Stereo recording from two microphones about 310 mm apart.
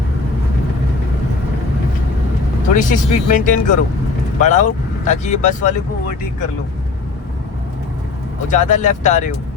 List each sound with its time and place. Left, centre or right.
2.7 s speech: left
8.4 s speech: left